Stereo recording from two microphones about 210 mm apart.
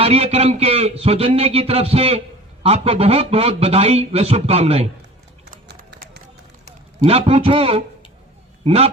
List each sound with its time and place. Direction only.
0.0 s a man's voice: 30° right (ahead or behind)
5.6 s run: 55° right (ahead or behind)
7.0 s a man's voice: 30° right (ahead or behind)